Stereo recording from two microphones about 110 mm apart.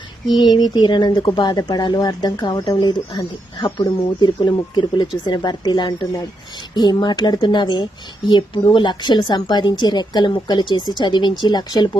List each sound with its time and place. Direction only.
0.3 s speech: 40° left (ahead or behind)